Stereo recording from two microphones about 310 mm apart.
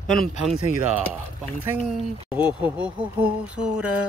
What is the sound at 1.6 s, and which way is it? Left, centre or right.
Speech, centre.